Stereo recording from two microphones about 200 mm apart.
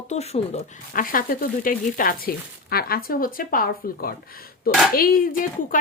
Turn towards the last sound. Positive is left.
turn(degrees=45)  # may be behind; listen again after turning